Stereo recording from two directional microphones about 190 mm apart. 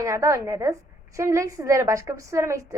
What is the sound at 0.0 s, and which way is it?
A woman's voice, 15° right (ahead or behind).